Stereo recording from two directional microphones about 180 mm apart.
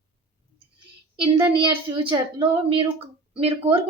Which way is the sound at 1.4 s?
25° right (ahead or behind).